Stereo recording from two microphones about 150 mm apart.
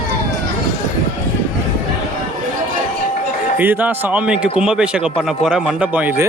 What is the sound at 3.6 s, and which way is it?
Speech, 10° right (ahead or behind).